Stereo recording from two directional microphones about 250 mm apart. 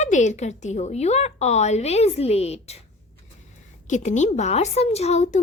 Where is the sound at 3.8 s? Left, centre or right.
Left.